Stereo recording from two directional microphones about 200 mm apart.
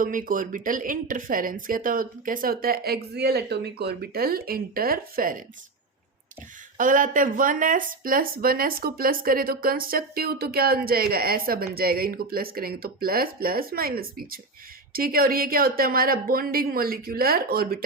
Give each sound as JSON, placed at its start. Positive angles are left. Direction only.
{"t": 0.0, "sound": "speech", "side_deg": -40}
{"t": 6.7, "sound": "speech", "side_deg": -40}